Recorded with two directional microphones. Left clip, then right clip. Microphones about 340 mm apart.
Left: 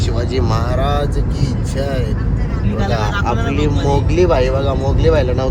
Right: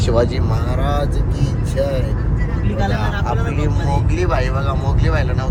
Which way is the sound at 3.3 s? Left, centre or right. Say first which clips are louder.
Left 4 dB; centre.